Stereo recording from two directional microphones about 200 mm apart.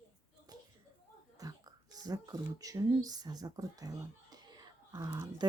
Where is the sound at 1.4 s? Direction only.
20° right (ahead or behind).